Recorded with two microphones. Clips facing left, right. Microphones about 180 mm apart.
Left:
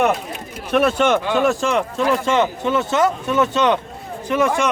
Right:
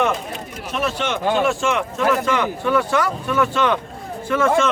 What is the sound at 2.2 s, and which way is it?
A man's voice, 25° left (ahead or behind).